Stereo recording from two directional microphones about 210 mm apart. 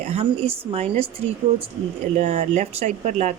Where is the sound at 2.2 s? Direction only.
35° right (ahead or behind).